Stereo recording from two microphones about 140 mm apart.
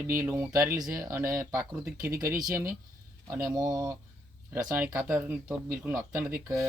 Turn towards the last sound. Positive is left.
turn(degrees=-15)  # may be behind; listen again after turning